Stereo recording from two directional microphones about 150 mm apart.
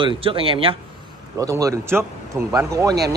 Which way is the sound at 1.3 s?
20° right (ahead or behind).